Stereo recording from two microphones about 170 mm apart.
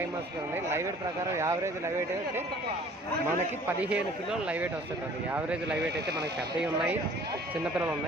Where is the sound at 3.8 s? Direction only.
5° right (ahead or behind).